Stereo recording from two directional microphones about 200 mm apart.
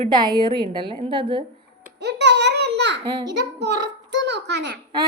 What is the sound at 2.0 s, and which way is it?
A child's voice, 60° right (ahead or behind).